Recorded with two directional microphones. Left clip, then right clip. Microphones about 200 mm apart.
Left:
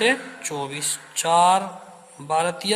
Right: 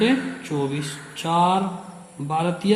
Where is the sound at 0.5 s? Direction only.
45° left (ahead or behind).